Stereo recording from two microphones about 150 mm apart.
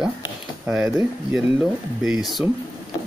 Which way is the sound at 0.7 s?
5° right (ahead or behind).